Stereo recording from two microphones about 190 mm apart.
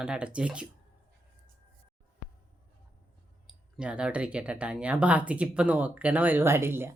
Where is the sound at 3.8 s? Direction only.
5° right (ahead or behind).